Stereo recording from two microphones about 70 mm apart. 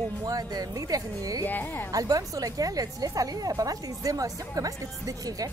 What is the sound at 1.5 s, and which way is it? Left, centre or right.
Speech, left.